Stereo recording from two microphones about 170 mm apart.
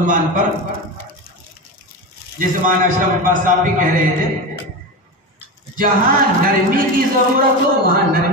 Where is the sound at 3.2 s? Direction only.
55° right (ahead or behind).